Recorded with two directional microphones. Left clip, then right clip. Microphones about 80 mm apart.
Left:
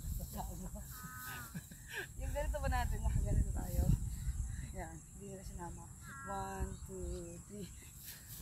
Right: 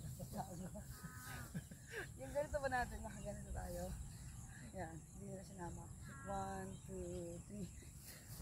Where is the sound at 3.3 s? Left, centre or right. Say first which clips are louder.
Left 2 dB; left.